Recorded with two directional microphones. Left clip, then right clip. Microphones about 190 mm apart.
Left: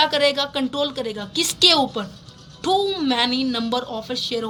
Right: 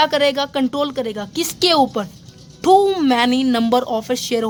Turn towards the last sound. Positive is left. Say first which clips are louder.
# right 5 dB
turn(degrees=-25)  # may be behind; listen again after turning